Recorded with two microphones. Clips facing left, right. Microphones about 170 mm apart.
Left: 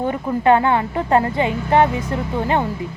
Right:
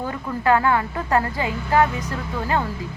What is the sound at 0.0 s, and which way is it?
Speech, 25° left (ahead or behind).